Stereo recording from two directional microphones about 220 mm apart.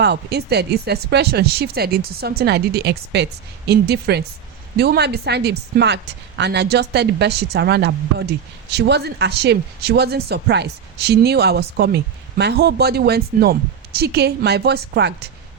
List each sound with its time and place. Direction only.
0.0 s speech: 50° right (ahead or behind)